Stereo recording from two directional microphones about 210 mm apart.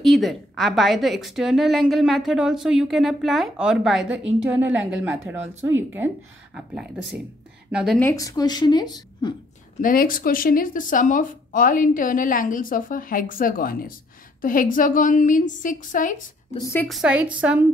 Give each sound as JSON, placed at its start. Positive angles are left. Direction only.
{"t": 0.0, "sound": "a woman's voice", "side_deg": 0}
{"t": 6.5, "sound": "a woman's voice", "side_deg": -5}
{"t": 8.0, "sound": "speech", "side_deg": 15}
{"t": 9.8, "sound": "speech", "side_deg": 40}
{"t": 16.8, "sound": "a woman's voice", "side_deg": 0}